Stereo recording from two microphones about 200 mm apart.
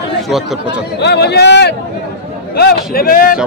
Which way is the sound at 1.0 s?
55° left (ahead or behind).